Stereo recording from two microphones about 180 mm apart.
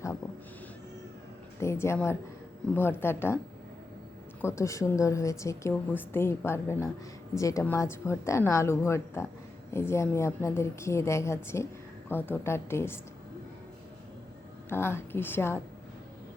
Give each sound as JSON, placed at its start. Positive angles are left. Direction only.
{"t": 1.5, "sound": "a woman's voice", "side_deg": 15}
{"t": 4.4, "sound": "a woman's voice", "side_deg": 15}
{"t": 14.7, "sound": "a woman's voice", "side_deg": 15}